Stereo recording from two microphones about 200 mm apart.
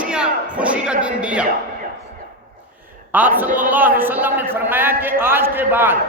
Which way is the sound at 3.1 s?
10° right (ahead or behind).